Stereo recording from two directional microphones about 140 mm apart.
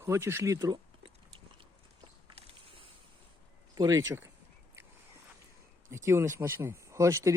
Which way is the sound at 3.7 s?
25° right (ahead or behind).